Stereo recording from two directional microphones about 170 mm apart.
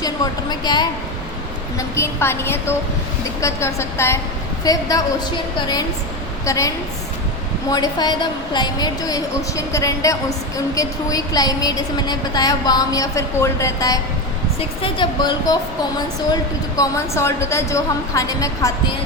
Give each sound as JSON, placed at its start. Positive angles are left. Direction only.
{"t": 0.6, "sound": "a woman's voice", "side_deg": 25}
{"t": 2.0, "sound": "a woman's voice", "side_deg": 15}
{"t": 6.4, "sound": "a woman's voice", "side_deg": 20}